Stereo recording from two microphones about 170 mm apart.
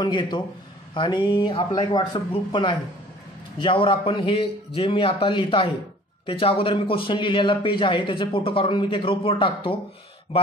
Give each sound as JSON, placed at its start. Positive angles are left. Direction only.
{"t": 0.0, "sound": "a man's voice", "side_deg": 25}